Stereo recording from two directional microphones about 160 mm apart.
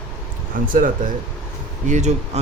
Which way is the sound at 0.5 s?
60° right (ahead or behind).